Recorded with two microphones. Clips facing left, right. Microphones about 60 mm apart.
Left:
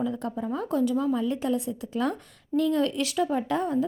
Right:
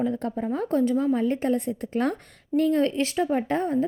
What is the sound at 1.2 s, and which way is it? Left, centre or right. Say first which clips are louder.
A woman's voice: right 3 dB; right.